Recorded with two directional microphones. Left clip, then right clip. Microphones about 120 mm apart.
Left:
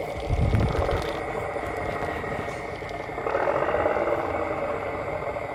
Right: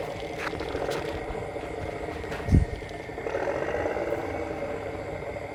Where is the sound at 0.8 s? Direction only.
25° right (ahead or behind).